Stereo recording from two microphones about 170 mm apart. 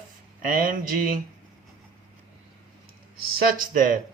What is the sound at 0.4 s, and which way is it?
Speech, 55° right (ahead or behind).